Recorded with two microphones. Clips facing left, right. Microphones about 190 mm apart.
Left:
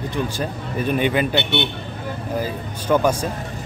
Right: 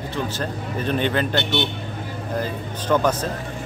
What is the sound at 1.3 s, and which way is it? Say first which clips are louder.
Speech: left 1 dB; 60° left (ahead or behind).